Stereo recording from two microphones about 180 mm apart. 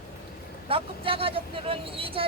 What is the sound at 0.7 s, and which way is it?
Speech, 30° right (ahead or behind).